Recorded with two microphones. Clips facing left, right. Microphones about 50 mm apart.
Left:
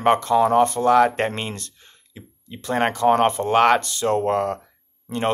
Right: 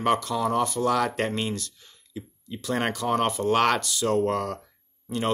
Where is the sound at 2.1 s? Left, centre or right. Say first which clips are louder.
Right 3 dB; left.